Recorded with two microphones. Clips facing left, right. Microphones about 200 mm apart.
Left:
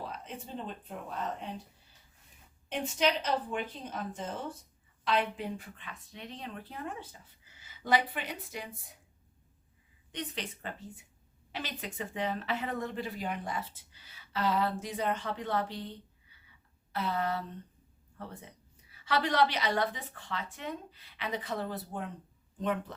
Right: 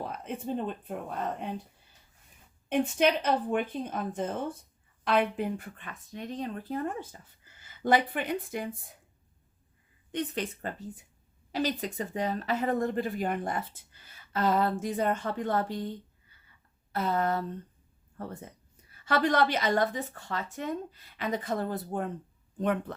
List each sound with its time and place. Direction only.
0.3 s speech: 55° right (ahead or behind)
2.6 s speech: 55° right (ahead or behind)
10.1 s speech: 50° right (ahead or behind)